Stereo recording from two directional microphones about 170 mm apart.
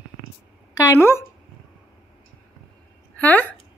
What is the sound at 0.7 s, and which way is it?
Speech, 15° left (ahead or behind).